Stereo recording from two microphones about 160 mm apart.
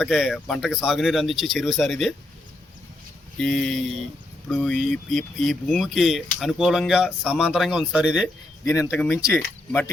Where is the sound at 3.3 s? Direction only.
5° left (ahead or behind).